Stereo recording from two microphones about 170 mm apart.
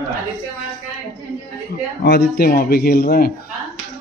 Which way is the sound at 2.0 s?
70° left (ahead or behind).